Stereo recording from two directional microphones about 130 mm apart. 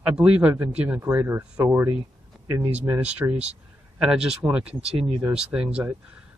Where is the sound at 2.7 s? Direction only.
10° right (ahead or behind).